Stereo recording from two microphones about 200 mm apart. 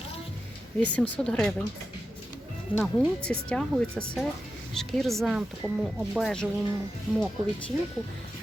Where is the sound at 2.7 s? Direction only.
25° left (ahead or behind).